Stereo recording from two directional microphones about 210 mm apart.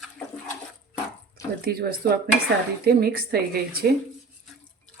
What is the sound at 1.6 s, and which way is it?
Speech, 45° right (ahead or behind).